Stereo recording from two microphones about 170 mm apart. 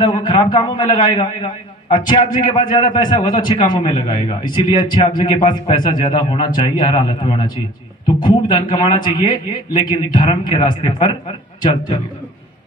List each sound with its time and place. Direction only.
0.0 s a man's voice: 25° left (ahead or behind)